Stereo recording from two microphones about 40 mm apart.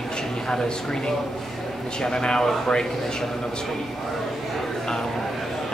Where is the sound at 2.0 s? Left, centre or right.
Centre.